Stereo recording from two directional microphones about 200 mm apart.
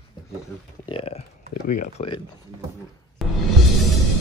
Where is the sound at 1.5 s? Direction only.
40° left (ahead or behind).